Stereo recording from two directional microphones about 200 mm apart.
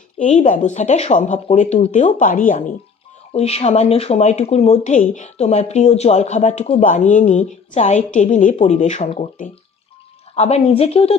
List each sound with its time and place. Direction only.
0.2 s speech: 40° left (ahead or behind)
3.3 s speech: 30° left (ahead or behind)